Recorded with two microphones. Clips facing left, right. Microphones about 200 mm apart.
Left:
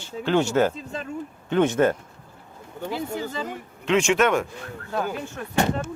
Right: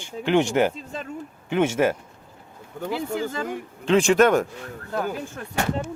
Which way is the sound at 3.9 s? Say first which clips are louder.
Right 3 dB; 35° right (ahead or behind).